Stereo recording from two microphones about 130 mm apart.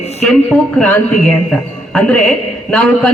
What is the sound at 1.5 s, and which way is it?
A man's voice, 5° left (ahead or behind).